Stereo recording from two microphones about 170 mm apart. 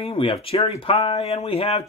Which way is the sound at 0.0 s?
35° left (ahead or behind).